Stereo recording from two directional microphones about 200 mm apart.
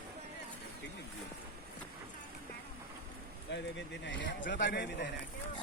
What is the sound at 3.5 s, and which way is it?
A man's voice, 65° left (ahead or behind).